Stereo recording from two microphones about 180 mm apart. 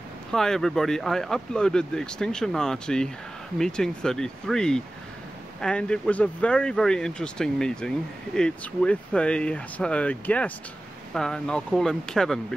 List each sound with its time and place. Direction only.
0.3 s speech: 5° left (ahead or behind)